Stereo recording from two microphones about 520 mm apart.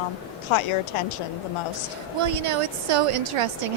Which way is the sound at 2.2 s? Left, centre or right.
Right.